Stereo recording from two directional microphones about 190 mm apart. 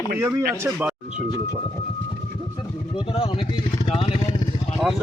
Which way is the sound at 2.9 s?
30° left (ahead or behind).